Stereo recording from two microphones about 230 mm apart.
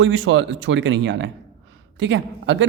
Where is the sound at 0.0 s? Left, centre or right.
Right.